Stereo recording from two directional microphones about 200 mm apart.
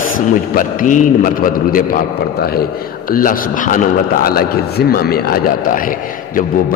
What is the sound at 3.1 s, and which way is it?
A man's voice, 45° left (ahead or behind).